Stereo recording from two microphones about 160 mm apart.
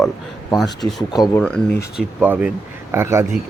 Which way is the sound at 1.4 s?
5° left (ahead or behind).